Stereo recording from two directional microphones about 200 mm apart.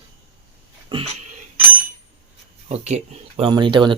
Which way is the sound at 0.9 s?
25° right (ahead or behind).